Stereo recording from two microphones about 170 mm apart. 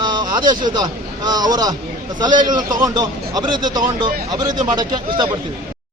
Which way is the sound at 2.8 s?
25° right (ahead or behind).